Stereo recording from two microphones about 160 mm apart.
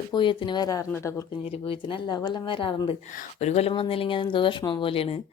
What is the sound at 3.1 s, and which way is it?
Speech, 45° left (ahead or behind).